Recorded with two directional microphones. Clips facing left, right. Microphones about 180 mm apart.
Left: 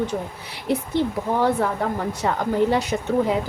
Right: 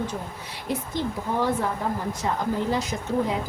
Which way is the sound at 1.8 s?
70° left (ahead or behind).